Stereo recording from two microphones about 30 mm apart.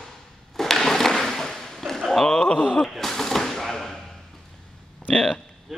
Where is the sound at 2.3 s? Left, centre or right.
Left.